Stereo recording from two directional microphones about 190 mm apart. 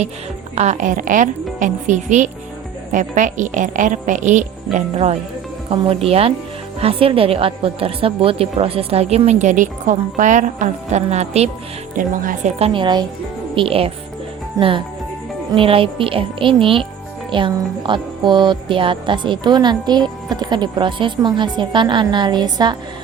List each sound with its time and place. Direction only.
0.5 s a woman's voice: 35° right (ahead or behind)
13.6 s music: 30° right (ahead or behind)
14.6 s speech: 15° right (ahead or behind)
15.5 s music: 30° right (ahead or behind)